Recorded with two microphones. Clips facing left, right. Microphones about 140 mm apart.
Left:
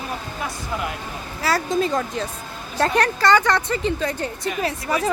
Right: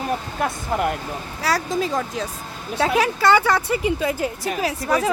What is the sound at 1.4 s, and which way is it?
Speech, centre (ahead or behind).